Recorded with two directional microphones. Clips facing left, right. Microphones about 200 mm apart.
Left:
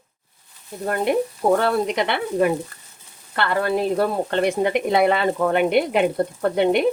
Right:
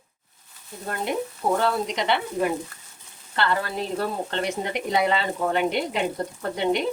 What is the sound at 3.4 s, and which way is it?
Speech, 60° left (ahead or behind).